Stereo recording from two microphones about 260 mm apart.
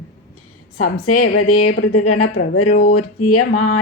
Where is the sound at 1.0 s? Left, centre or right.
Left.